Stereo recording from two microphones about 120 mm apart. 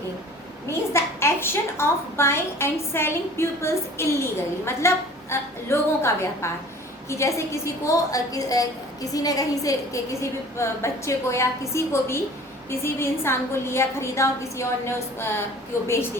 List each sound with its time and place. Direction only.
0.9 s a woman's voice: 20° left (ahead or behind)